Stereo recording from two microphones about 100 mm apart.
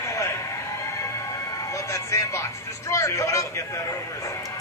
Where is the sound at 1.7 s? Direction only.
35° left (ahead or behind).